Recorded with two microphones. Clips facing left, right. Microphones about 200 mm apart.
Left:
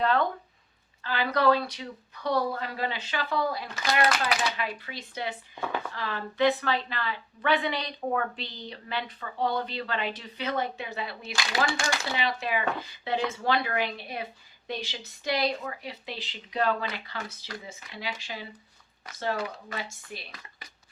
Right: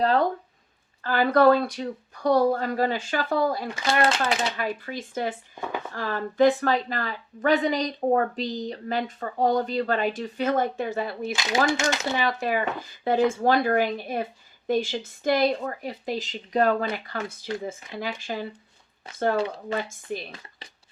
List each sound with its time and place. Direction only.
0.0 s speech: 35° right (ahead or behind)
1.0 s a woman's voice: 50° right (ahead or behind)
4.0 s speech: 25° right (ahead or behind)
4.5 s a woman's voice: 45° right (ahead or behind)
11.8 s speech: 20° right (ahead or behind)
12.1 s a woman's voice: 45° right (ahead or behind)
19.1 s speech: 30° right (ahead or behind)
19.7 s a woman's voice: 50° right (ahead or behind)